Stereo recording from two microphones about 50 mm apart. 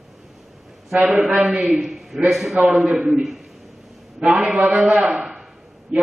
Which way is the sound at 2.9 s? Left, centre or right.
Right.